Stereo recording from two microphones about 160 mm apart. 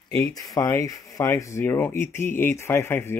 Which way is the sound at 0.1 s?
20° left (ahead or behind).